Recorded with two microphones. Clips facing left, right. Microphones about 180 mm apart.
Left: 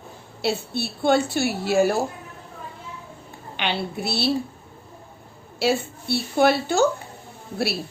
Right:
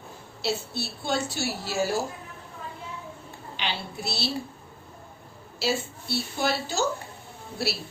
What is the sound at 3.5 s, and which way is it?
Speech, 60° left (ahead or behind).